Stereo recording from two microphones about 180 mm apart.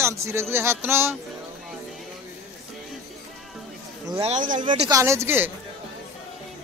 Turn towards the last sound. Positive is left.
turn(degrees=-15)  # may be behind; listen again after turning